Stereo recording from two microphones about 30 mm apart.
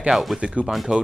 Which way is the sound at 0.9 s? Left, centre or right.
Right.